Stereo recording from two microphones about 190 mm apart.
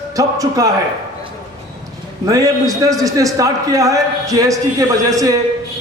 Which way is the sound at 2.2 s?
20° right (ahead or behind).